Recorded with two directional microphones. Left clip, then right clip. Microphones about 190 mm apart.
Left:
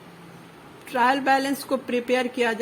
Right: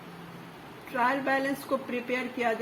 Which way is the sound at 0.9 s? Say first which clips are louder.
Left 7 dB; 60° left (ahead or behind).